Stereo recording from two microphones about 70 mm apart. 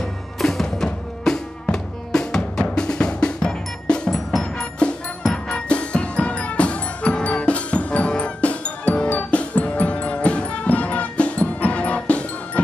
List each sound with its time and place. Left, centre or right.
0.0 s music: centre